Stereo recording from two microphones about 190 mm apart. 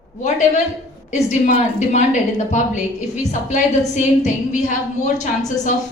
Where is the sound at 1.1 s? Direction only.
35° left (ahead or behind).